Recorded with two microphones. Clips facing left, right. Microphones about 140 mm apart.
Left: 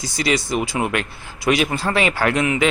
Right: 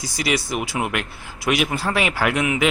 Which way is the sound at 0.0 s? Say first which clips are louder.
Left 2 dB; 5° right (ahead or behind).